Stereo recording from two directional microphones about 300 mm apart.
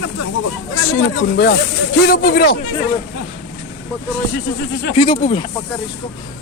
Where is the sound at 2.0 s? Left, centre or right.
Left.